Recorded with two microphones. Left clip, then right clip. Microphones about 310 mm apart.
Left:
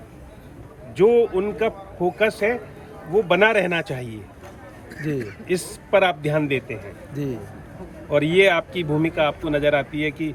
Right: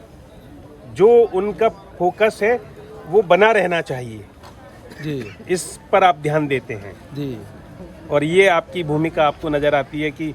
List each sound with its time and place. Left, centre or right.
0.9 s a man's voice: right
5.1 s a man's voice: centre
5.5 s a man's voice: right
8.1 s a man's voice: right